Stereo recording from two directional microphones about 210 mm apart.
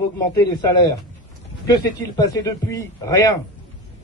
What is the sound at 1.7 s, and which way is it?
A man's voice, 15° left (ahead or behind).